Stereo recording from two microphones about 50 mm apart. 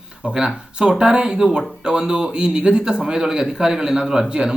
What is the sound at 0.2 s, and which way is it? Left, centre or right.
A man's voice, centre.